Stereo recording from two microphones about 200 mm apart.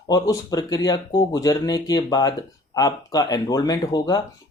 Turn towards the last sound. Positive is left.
turn(degrees=20)  # may be behind; listen again after turning